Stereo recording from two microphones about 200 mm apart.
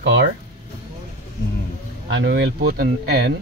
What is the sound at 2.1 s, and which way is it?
Speech, 60° right (ahead or behind).